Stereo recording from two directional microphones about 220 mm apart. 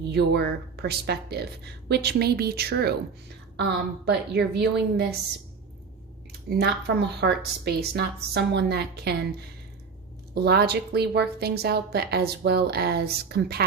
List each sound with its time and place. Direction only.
0.1 s a woman's voice: 50° right (ahead or behind)
6.6 s a woman's voice: 50° right (ahead or behind)
10.3 s a woman's voice: 45° right (ahead or behind)